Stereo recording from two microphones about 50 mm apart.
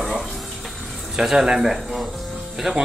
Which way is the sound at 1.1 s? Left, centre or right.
Centre.